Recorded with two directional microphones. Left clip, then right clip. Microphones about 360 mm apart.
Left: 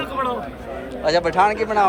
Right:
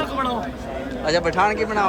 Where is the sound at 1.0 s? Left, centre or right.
Centre.